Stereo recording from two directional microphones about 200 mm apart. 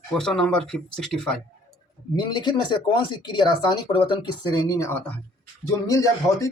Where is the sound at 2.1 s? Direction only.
20° left (ahead or behind).